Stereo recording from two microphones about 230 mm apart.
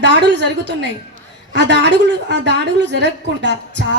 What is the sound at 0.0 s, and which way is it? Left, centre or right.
A woman's voice, right.